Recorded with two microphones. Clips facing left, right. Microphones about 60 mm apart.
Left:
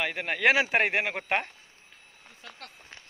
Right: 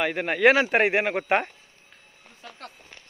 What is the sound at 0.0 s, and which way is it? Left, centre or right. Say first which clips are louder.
Speech: right 5 dB; centre.